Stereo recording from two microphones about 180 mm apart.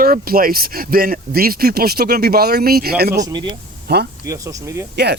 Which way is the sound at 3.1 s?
20° right (ahead or behind).